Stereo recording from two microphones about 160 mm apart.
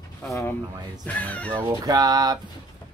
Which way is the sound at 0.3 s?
20° left (ahead or behind).